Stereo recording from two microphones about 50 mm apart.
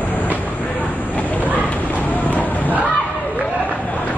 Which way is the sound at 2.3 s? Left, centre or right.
Left.